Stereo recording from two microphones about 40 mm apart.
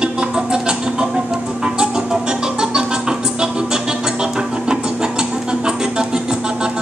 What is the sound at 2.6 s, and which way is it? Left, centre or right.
Music, centre.